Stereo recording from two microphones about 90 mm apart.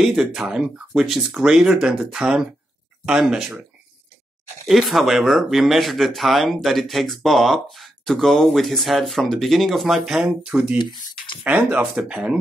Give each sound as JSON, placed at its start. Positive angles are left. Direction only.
{"t": 0.0, "sound": "speech", "side_deg": -5}
{"t": 4.6, "sound": "speech", "side_deg": 0}
{"t": 10.8, "sound": "a sound", "side_deg": 65}
{"t": 11.4, "sound": "speech", "side_deg": -20}